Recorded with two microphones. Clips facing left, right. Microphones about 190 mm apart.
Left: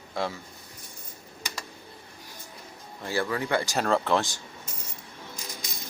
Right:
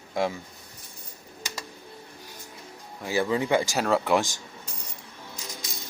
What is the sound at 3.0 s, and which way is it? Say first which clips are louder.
Speech: right 3 dB; 15° right (ahead or behind).